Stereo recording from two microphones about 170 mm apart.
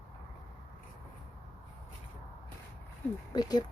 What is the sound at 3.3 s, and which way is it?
Speech, 25° left (ahead or behind).